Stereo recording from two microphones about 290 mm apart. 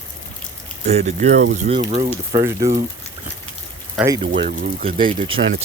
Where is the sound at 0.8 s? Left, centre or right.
Right.